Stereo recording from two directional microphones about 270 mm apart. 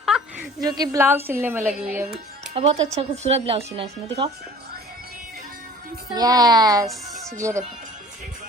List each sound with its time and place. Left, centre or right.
0.6 s a woman's voice: centre
2.5 s speech: right
6.1 s a woman's voice: centre